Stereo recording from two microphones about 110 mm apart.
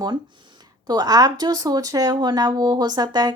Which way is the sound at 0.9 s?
35° right (ahead or behind).